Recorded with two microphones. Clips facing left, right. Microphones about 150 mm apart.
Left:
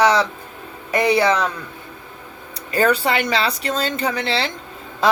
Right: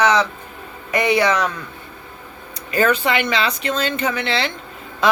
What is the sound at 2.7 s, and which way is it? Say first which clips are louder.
Speech: even; 35° left (ahead or behind).